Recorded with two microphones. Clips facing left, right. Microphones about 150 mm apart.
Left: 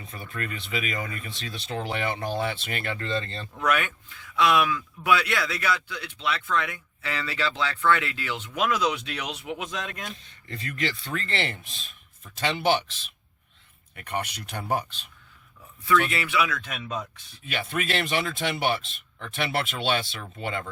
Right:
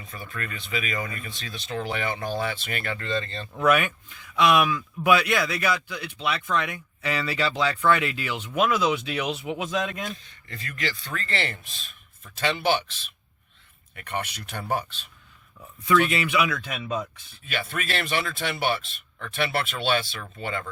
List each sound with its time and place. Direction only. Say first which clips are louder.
0.1 s speech: left 1 dB; 25° left (ahead or behind)
3.6 s speech: right 4 dB; 10° right (ahead or behind)
10.5 s speech: left 2 dB; 25° left (ahead or behind)
14.0 s speech: even; 15° left (ahead or behind)
15.8 s speech: right 2 dB; 20° right (ahead or behind)
17.5 s speech: left 1 dB; 20° left (ahead or behind)